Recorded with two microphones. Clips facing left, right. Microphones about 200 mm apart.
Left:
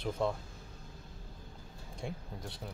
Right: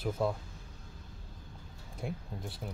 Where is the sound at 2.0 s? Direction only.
5° right (ahead or behind).